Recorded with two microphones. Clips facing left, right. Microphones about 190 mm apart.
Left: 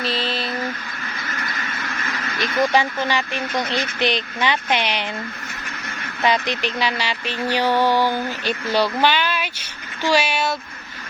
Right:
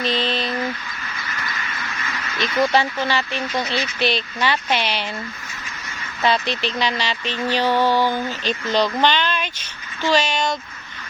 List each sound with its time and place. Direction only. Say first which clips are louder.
0.0 s a sound: right 2 dB; 5° left (ahead or behind)
2.4 s speech: even; 10° left (ahead or behind)
6.2 s speech: even; 15° left (ahead or behind)